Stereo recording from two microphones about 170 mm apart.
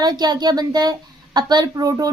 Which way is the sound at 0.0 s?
25° right (ahead or behind).